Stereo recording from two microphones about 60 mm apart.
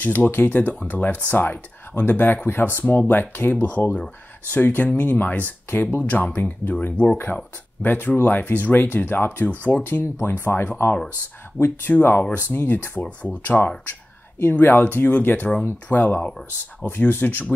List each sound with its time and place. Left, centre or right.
0.0 s speech: left
10.1 s speech: left
13.0 s speech: left